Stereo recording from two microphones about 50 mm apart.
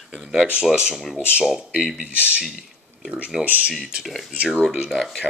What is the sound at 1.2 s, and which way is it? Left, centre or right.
Speech, right.